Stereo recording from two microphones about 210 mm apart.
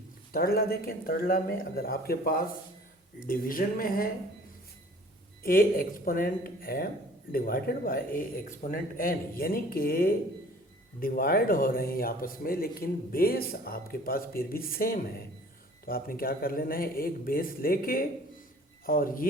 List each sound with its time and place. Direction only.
0.3 s speech: 45° left (ahead or behind)
5.4 s speech: 45° left (ahead or behind)